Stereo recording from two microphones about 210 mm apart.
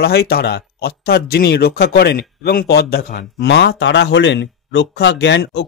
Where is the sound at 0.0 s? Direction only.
50° left (ahead or behind).